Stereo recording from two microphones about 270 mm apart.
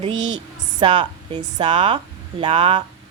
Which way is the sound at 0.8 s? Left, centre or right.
Centre.